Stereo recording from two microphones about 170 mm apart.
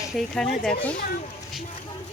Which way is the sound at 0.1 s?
Centre (ahead or behind).